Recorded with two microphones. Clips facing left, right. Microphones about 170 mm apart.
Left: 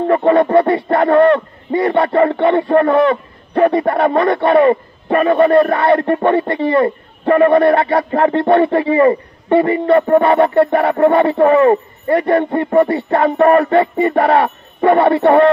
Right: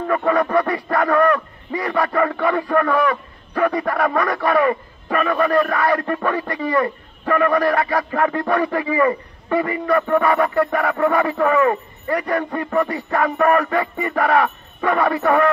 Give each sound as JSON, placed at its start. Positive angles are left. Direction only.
{"t": 0.0, "sound": "speech", "side_deg": 30}